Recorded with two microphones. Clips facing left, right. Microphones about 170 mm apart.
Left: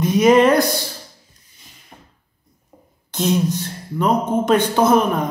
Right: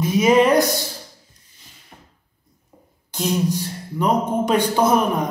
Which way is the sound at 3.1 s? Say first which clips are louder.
Left 2 dB; 10° right (ahead or behind).